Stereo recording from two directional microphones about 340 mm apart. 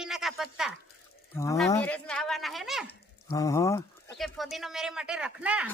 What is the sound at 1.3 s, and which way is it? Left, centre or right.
Speech, centre.